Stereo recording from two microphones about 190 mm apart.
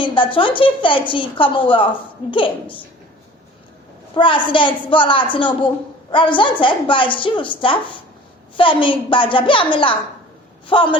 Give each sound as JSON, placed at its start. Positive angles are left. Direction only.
{"t": 0.0, "sound": "a woman's voice", "side_deg": 25}
{"t": 4.1, "sound": "a woman's voice", "side_deg": 25}